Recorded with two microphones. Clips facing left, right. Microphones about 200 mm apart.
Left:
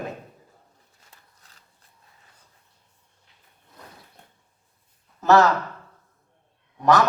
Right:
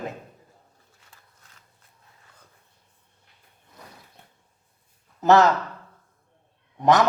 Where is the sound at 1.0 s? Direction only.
40° left (ahead or behind).